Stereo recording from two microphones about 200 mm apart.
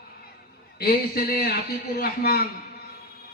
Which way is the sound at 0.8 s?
50° left (ahead or behind).